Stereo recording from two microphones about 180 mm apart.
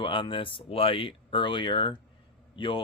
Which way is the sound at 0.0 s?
30° left (ahead or behind).